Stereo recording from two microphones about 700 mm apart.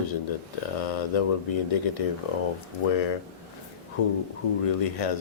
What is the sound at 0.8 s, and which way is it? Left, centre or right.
Speech, left.